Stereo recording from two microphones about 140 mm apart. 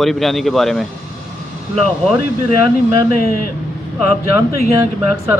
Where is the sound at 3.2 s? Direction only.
90° left.